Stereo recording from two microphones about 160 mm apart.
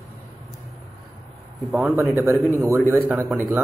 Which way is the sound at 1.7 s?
5° right (ahead or behind).